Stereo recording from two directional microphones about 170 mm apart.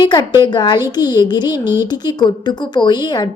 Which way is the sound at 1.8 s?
25° left (ahead or behind).